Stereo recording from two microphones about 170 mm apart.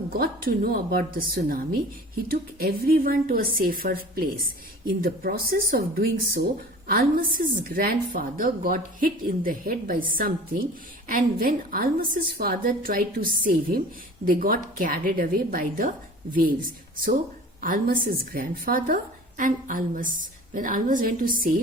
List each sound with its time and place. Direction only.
0.1 s a woman's voice: 60° right (ahead or behind)
17.6 s a woman's voice: 55° right (ahead or behind)